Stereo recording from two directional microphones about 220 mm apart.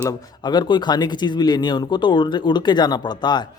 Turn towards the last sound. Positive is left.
turn(degrees=20)  # may be behind; listen again after turning